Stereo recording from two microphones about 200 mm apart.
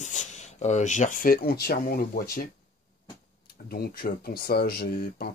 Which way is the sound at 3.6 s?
50° left (ahead or behind).